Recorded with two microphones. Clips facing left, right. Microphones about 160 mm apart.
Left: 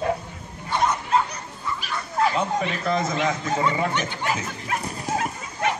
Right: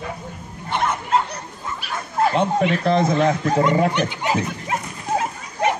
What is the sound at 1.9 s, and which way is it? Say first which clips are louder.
Dog: right 3 dB; 50° right (ahead or behind).